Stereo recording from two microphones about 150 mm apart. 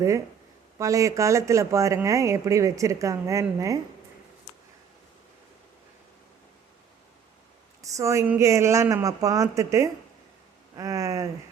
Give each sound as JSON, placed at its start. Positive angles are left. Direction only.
{"t": 0.8, "sound": "speech", "side_deg": -20}
{"t": 7.8, "sound": "speech", "side_deg": -20}